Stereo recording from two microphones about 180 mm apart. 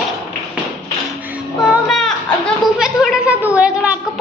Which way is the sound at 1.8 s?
5° left (ahead or behind).